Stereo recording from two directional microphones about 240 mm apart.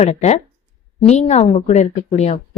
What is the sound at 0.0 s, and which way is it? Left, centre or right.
A woman's voice, left.